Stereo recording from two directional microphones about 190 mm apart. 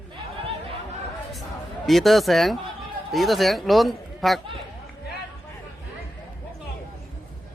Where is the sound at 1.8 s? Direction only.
Centre (ahead or behind).